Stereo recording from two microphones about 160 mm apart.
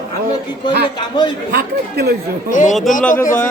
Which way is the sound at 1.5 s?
80° right.